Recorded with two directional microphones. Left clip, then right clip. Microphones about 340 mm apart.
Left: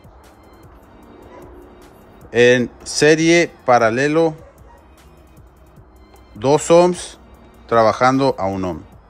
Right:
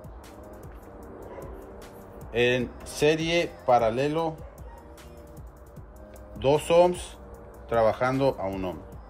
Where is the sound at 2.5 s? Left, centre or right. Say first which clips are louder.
Left 12 dB; left.